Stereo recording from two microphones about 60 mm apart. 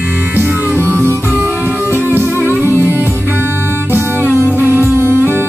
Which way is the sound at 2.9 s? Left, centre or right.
Left.